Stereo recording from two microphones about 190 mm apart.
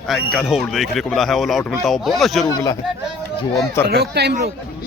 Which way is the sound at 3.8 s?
60° right (ahead or behind).